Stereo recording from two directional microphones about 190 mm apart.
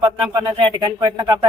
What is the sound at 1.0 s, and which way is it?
Speech, 20° right (ahead or behind).